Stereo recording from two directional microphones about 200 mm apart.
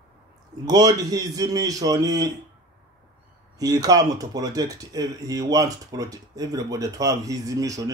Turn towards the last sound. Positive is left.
turn(degrees=-15)  # may be behind; listen again after turning